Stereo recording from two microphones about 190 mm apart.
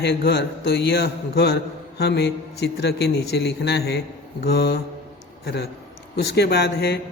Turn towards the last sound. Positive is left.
turn(degrees=60)  # may be behind; listen again after turning